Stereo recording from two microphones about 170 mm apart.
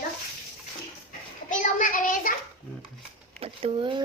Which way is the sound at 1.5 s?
50° left (ahead or behind).